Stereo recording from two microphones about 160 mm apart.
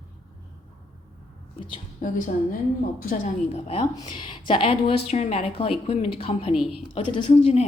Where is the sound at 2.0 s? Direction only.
55° left (ahead or behind).